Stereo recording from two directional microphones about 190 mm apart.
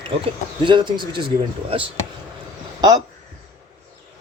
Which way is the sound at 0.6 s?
25° right (ahead or behind).